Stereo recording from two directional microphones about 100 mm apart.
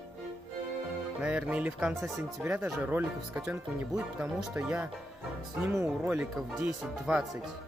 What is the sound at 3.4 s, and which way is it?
Speech, 10° right (ahead or behind).